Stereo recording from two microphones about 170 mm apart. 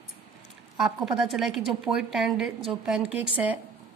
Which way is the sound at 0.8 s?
Centre (ahead or behind).